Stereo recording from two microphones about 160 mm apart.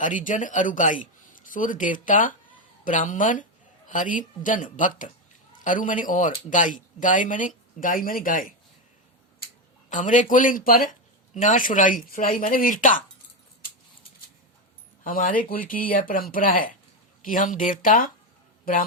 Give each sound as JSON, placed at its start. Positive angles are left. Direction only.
{"t": 0.0, "sound": "speech", "side_deg": 55}
{"t": 9.9, "sound": "speech", "side_deg": 50}
{"t": 15.0, "sound": "speech", "side_deg": 60}